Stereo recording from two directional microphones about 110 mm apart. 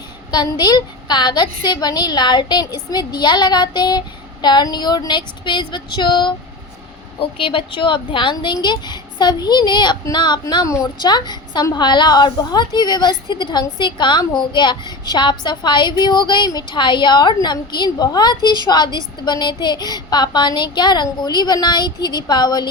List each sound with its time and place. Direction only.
0.3 s a woman's voice: 40° left (ahead or behind)